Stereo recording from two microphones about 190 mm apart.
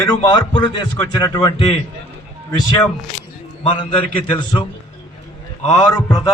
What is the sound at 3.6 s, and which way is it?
Speech, 25° left (ahead or behind).